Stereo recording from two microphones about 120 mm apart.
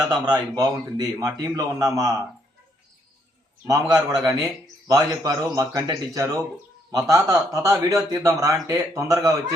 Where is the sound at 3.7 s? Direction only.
25° right (ahead or behind).